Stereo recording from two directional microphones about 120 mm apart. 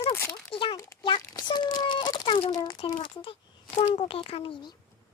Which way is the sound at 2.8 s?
45° left (ahead or behind).